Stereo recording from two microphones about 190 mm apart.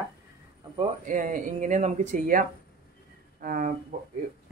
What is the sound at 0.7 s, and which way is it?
Speech, 40° right (ahead or behind).